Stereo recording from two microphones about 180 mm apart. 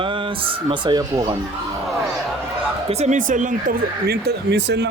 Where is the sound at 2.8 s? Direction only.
35° right (ahead or behind).